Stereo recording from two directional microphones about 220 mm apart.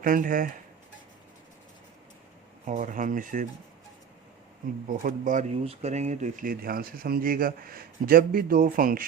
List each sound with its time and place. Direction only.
0.0 s speech: 40° right (ahead or behind)
2.6 s speech: 35° right (ahead or behind)
4.9 s speech: 40° right (ahead or behind)